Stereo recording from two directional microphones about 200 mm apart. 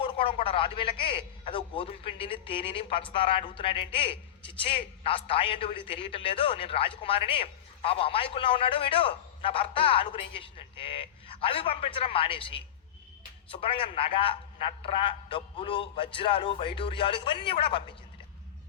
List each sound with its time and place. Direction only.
0.0 s a man's voice: 25° left (ahead or behind)